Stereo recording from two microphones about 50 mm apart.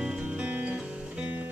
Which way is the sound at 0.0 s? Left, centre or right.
Right.